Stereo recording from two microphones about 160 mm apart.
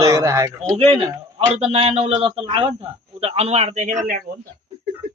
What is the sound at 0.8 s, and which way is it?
A man's voice, 40° right (ahead or behind).